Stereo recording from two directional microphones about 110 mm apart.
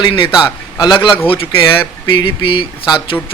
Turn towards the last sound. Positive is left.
turn(degrees=50)  # may be behind; listen again after turning